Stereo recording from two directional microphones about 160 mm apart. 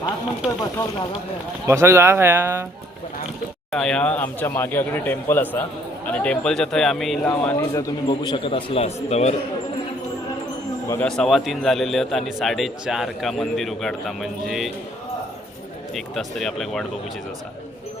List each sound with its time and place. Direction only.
1.6 s speech: 15° right (ahead or behind)
3.7 s speech: 5° left (ahead or behind); by 9.3 s 40° left (ahead or behind)
10.8 s speech: 10° left (ahead or behind)
11.2 s a man's voice: centre (ahead or behind)
16.0 s a man's voice: centre (ahead or behind)